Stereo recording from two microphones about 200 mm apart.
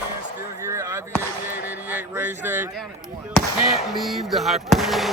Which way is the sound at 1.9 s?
10° right (ahead or behind).